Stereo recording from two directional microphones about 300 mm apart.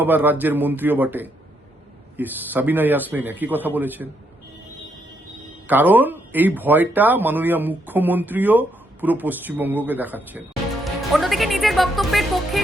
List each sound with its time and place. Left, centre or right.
0.0 s a man's voice: centre
5.6 s speech: centre